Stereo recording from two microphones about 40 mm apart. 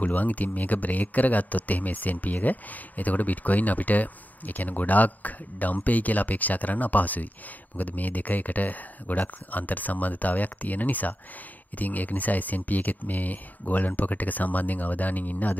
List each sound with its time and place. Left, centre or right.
0.0 s speech: left